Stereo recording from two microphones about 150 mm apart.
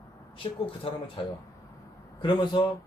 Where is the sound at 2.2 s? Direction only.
30° left (ahead or behind).